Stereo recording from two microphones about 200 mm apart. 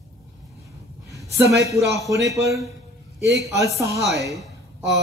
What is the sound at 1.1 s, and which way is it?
Speech, 15° right (ahead or behind).